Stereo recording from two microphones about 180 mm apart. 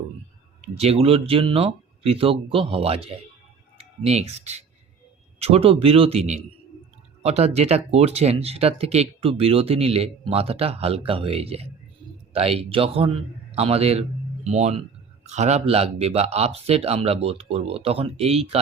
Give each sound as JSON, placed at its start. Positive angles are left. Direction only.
{"t": 0.6, "sound": "speech", "side_deg": -35}